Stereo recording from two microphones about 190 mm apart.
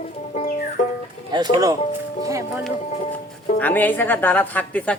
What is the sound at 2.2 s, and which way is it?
Music, 15° right (ahead or behind).